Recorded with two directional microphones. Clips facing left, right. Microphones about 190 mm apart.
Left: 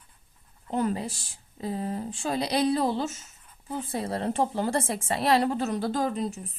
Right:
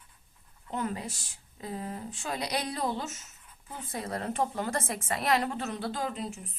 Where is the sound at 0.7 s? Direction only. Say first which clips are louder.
Left 6 dB; 35° left (ahead or behind).